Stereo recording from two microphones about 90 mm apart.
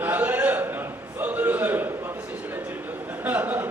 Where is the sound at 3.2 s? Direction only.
20° right (ahead or behind).